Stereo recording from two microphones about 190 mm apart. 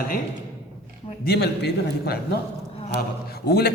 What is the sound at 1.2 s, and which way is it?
A man's voice, 60° left (ahead or behind).